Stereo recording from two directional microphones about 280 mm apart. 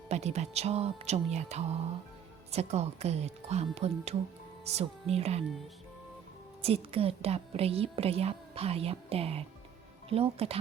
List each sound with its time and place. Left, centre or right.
0.1 s a woman's voice: right
6.6 s a woman's voice: right